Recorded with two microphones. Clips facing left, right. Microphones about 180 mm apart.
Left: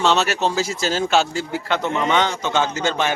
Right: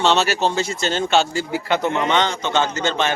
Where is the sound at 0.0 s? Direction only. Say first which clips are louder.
Right 1 dB; centre (ahead or behind).